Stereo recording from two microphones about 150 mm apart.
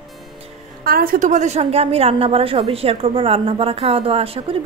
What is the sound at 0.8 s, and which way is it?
A woman's voice, 75° right (ahead or behind).